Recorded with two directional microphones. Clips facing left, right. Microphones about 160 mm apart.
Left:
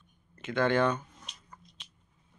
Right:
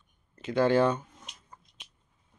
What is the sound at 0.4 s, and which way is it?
Speech, 35° right (ahead or behind).